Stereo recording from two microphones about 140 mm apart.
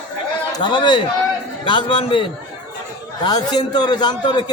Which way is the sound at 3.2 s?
30° left (ahead or behind).